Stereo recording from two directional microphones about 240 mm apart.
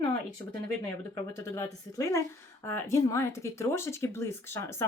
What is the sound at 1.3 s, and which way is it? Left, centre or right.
Speech, centre.